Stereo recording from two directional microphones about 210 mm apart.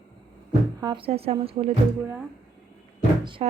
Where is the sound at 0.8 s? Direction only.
25° right (ahead or behind).